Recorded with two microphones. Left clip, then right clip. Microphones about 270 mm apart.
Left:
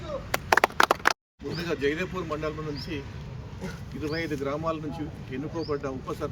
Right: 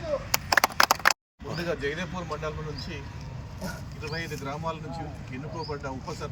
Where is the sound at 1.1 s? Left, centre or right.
Centre.